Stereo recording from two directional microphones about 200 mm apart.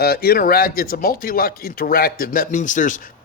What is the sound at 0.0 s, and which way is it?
Speech, 50° left (ahead or behind).